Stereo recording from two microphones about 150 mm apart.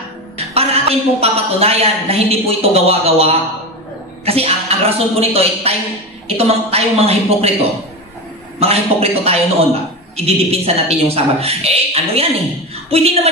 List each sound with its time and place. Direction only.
0.6 s a man's voice: 40° right (ahead or behind)
8.5 s a man's voice: 45° right (ahead or behind)